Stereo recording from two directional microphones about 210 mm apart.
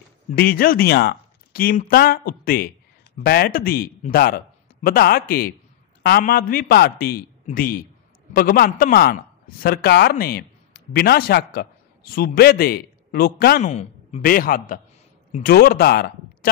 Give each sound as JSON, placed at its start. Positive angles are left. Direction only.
{"t": 0.4, "sound": "speech", "side_deg": 45}
{"t": 13.6, "sound": "a man's voice", "side_deg": 35}